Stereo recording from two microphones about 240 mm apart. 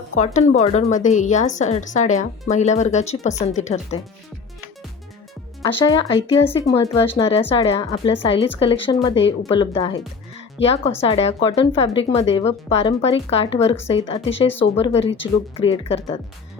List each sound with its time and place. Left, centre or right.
0.2 s speech: left
5.8 s speech: centre
6.7 s speech: left